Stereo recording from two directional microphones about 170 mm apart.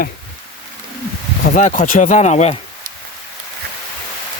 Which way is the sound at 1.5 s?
45° left (ahead or behind).